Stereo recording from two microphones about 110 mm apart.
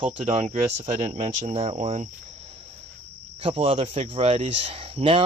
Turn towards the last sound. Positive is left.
turn(degrees=-55)  # may be behind; listen again after turning